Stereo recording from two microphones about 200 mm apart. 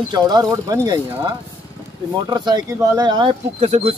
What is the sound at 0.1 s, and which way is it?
Speech, 20° right (ahead or behind).